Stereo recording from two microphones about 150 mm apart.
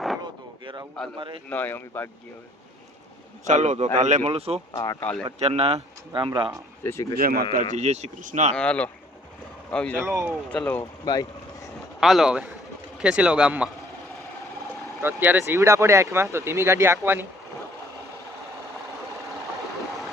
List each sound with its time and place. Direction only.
0.6 s a sound: 35° right (ahead or behind)
1.5 s speech: 10° left (ahead or behind)
3.4 s speech: 50° right (ahead or behind)
4.7 s speech: 20° left (ahead or behind)
5.4 s speech: 45° right (ahead or behind)
6.8 s speech: 15° left (ahead or behind)
7.2 s speech: 75° right (ahead or behind)
7.7 s speech: 50° right (ahead or behind)
8.5 s speech: 5° left (ahead or behind)
10.1 s speech: 20° right (ahead or behind)
10.5 s speech: 10° left (ahead or behind)
11.0 s vehicle: 25° left (ahead or behind)
11.9 s speech: centre (ahead or behind)
15.0 s speech: 15° right (ahead or behind)